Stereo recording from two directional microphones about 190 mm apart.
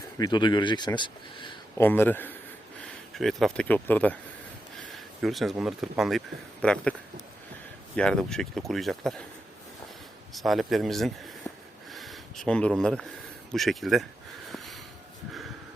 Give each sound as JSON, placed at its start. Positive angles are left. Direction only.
{"t": 0.2, "sound": "speech", "side_deg": 25}
{"t": 1.8, "sound": "speech", "side_deg": 10}
{"t": 7.9, "sound": "speech", "side_deg": 5}
{"t": 10.3, "sound": "speech", "side_deg": 0}
{"t": 11.9, "sound": "a sound", "side_deg": 0}
{"t": 13.5, "sound": "speech", "side_deg": 0}
{"t": 14.5, "sound": "a sound", "side_deg": 0}